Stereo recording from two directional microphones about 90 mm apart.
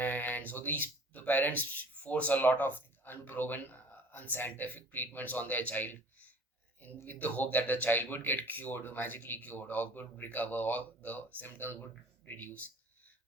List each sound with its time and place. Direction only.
0.0 s speech: 20° left (ahead or behind)